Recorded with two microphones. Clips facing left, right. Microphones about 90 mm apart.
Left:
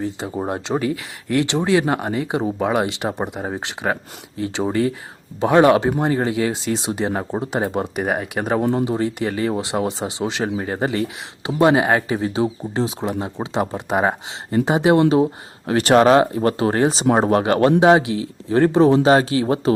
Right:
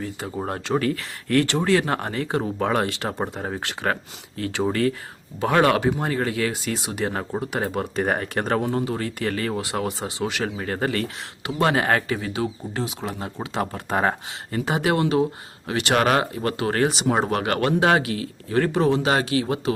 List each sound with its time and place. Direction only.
0.3 s speech: 20° left (ahead or behind)
8.0 s speech: 5° left (ahead or behind)
8.7 s speech: 20° left (ahead or behind); by 16.0 s 35° left (ahead or behind)
16.0 s speech: 25° left (ahead or behind)